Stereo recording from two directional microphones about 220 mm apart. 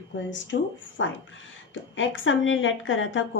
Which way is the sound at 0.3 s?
55° left (ahead or behind).